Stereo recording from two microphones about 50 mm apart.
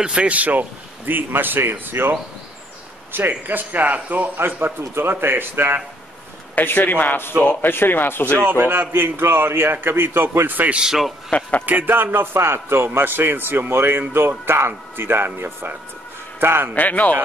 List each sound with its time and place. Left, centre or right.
0.0 s a man's voice: right
4.4 s a man's voice: right
6.5 s speech: left
8.5 s a man's voice: right
10.7 s a man's voice: centre
11.6 s a man's voice: right
16.7 s speech: left